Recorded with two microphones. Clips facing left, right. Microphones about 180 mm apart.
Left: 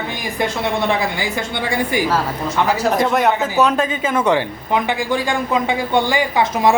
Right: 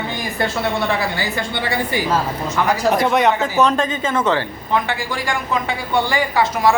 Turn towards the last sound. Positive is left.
turn(degrees=20)  # may be behind; listen again after turning